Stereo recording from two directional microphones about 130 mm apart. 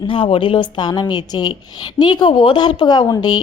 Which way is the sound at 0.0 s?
40° left (ahead or behind).